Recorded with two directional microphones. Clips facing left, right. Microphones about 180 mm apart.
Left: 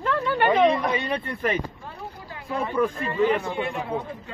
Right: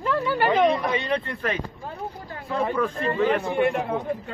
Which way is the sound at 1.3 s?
15° left (ahead or behind).